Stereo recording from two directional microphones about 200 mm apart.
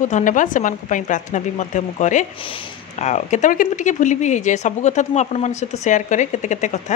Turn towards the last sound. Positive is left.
turn(degrees=35)  # may be behind; listen again after turning